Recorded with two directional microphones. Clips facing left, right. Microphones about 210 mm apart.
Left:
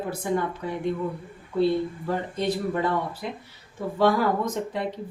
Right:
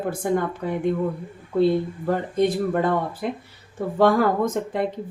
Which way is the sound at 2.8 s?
50° right (ahead or behind).